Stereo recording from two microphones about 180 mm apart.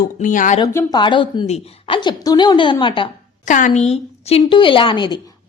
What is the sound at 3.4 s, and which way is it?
A woman's voice, 45° left (ahead or behind).